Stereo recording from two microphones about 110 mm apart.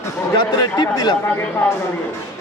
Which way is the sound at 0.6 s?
35° left (ahead or behind).